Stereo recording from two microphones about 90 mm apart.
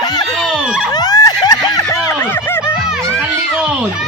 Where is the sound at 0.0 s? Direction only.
45° left (ahead or behind).